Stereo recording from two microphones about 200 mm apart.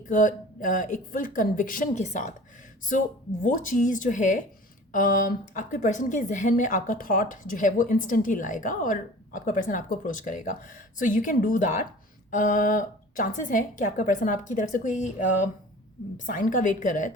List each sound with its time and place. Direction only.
0.1 s a woman's voice: 40° left (ahead or behind)
3.4 s a woman's voice: 40° left (ahead or behind)
16.1 s a woman's voice: 40° left (ahead or behind)